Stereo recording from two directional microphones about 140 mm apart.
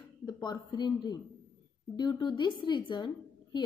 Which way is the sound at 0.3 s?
30° left (ahead or behind).